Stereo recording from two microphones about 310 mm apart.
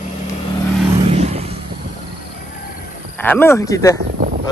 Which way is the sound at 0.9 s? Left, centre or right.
Centre.